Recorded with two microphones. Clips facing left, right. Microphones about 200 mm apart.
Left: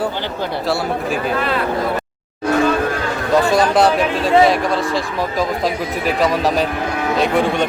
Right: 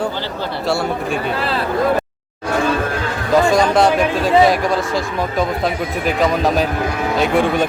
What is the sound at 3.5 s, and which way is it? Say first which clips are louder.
Speech: even; centre (ahead or behind).